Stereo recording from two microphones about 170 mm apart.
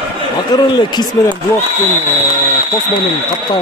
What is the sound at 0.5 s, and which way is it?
Speech, 25° left (ahead or behind).